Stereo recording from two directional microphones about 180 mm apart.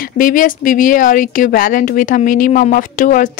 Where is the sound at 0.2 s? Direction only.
50° left (ahead or behind).